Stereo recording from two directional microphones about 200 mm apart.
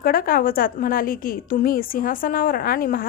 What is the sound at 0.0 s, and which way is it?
A woman's voice, 45° left (ahead or behind).